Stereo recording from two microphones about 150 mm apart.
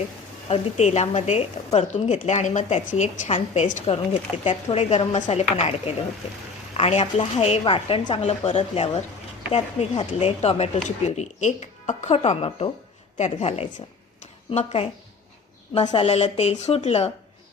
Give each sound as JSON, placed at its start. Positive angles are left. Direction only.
{"t": 0.4, "sound": "speech", "side_deg": 45}
{"t": 6.7, "sound": "a woman's voice", "side_deg": 40}
{"t": 14.2, "sound": "a sound", "side_deg": 45}
{"t": 15.8, "sound": "a woman's voice", "side_deg": 30}
{"t": 16.0, "sound": "speech", "side_deg": 45}